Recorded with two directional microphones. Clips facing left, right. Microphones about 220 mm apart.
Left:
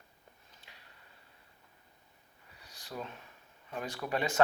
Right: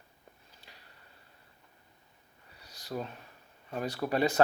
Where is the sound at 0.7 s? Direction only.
35° right (ahead or behind).